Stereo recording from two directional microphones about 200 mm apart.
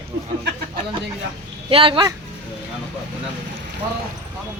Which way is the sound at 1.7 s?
25° right (ahead or behind).